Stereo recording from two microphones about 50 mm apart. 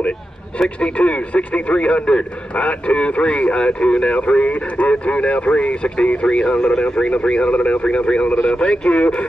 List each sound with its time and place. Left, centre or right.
0.7 s speech: left